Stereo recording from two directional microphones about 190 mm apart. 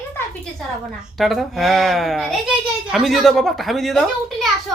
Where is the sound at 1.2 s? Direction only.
Centre (ahead or behind).